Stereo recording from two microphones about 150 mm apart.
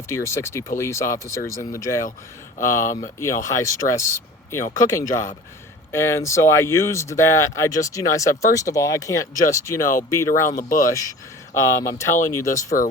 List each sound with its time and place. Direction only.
0.1 s speech: 20° left (ahead or behind)
2.8 s speech: 60° left (ahead or behind)
3.2 s speech: 20° left (ahead or behind)
10.5 s speech: 65° left (ahead or behind)
11.5 s speech: 20° left (ahead or behind)